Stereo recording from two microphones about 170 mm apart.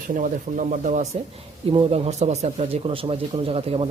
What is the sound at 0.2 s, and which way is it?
Speech, 50° right (ahead or behind).